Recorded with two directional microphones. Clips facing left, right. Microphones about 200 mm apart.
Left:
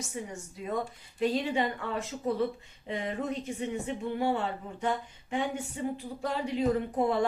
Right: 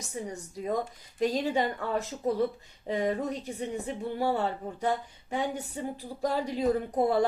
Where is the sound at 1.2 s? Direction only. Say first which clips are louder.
Right 1 dB; 40° right (ahead or behind).